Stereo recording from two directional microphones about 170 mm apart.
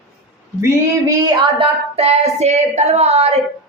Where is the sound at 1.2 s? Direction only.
30° right (ahead or behind).